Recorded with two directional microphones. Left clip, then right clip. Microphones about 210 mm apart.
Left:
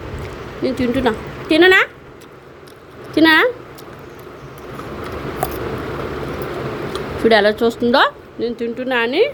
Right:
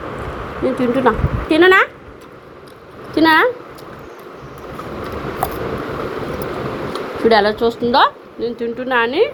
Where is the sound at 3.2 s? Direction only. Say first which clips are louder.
Even; 30° left (ahead or behind).